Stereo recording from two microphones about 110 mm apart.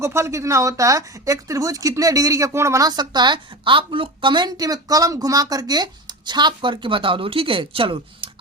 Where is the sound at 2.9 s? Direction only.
40° right (ahead or behind).